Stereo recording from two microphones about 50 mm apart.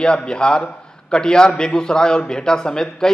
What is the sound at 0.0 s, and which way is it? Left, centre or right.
Speech, centre.